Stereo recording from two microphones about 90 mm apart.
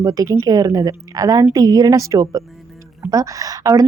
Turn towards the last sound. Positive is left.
turn(degrees=-40)  # may be behind; listen again after turning